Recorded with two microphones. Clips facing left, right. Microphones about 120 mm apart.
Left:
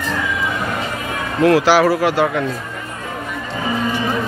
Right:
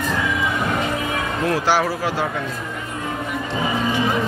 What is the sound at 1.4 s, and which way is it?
Speech, 85° left.